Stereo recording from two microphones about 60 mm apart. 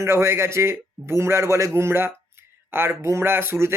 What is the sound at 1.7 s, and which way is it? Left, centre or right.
A man's voice, right.